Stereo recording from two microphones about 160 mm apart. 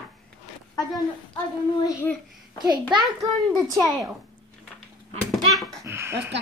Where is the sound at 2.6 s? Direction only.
25° right (ahead or behind).